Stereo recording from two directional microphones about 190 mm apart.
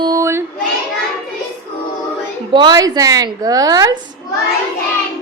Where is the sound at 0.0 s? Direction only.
15° right (ahead or behind).